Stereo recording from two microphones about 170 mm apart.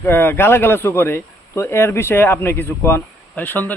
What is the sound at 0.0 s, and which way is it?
Speech, 15° left (ahead or behind).